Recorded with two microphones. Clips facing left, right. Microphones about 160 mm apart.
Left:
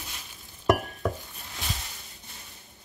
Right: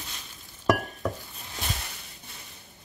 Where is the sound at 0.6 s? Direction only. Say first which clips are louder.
Left 1 dB; centre (ahead or behind).